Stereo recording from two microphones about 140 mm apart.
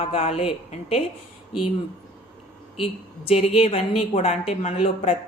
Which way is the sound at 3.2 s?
45° left (ahead or behind).